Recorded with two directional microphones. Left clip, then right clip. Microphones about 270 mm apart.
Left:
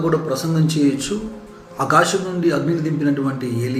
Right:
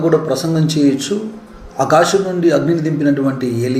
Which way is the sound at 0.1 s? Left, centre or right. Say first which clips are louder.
Right 5 dB; centre.